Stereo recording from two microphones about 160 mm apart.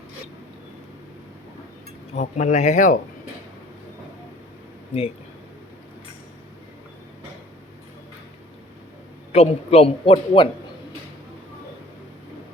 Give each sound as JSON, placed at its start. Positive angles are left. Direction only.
{"t": 2.1, "sound": "speech", "side_deg": 45}
{"t": 9.3, "sound": "a man's voice", "side_deg": 40}